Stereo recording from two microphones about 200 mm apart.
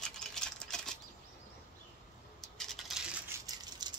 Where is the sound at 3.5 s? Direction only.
20° right (ahead or behind).